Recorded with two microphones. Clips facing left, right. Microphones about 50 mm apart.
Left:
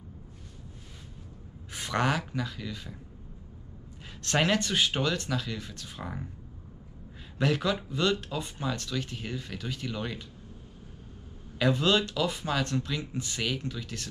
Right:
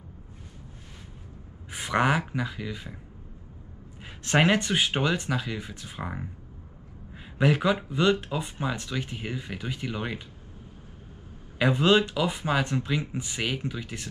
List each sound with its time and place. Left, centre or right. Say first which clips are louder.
1.7 s speech: right 4 dB; centre
4.0 s speech: right 4 dB; right
7.3 s speech: right 4 dB; centre
11.5 s speech: right 4 dB; right